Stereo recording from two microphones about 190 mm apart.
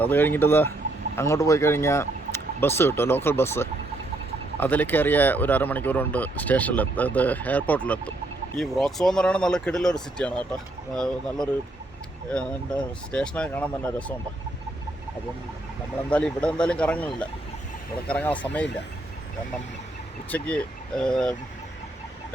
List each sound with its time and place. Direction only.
0.0 s speech: 10° left (ahead or behind)
16.0 s speech: 5° left (ahead or behind)
20.3 s speech: 5° left (ahead or behind)